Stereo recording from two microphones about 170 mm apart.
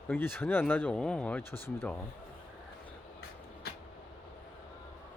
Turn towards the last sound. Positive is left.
turn(degrees=70)  # may be behind; listen again after turning